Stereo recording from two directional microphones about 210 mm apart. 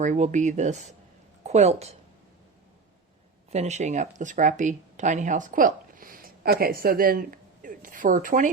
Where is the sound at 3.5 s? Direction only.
35° right (ahead or behind).